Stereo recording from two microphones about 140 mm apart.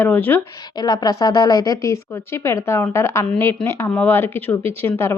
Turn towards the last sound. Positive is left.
turn(degrees=20)  # may be behind; listen again after turning